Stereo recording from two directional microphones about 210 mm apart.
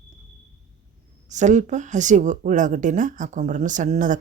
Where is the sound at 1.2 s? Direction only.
35° right (ahead or behind).